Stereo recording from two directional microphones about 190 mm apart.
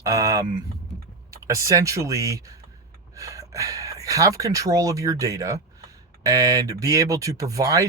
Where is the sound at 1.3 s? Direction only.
15° right (ahead or behind).